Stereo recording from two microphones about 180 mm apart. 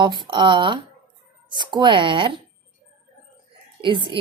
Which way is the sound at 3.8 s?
25° right (ahead or behind).